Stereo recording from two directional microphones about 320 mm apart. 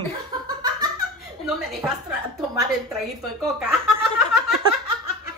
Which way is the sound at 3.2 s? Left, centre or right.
Centre.